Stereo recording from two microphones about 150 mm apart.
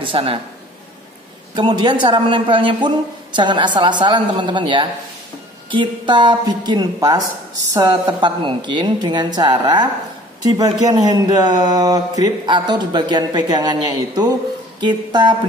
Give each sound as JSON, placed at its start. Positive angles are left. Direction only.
{"t": 0.0, "sound": "a man's voice", "side_deg": -40}
{"t": 1.5, "sound": "a man's voice", "side_deg": -30}